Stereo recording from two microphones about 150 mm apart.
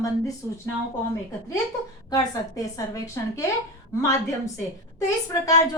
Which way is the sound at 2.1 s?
25° left (ahead or behind).